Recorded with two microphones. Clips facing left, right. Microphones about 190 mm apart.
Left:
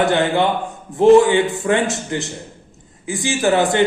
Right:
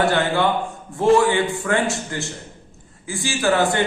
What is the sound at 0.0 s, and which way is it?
A man's voice, 20° left (ahead or behind).